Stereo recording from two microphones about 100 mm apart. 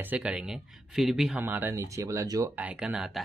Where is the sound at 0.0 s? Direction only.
15° right (ahead or behind).